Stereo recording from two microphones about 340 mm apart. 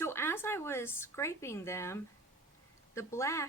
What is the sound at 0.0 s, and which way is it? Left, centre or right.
A woman's voice, centre.